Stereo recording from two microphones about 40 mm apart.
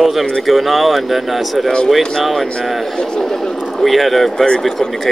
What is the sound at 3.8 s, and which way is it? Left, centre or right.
Speech, centre.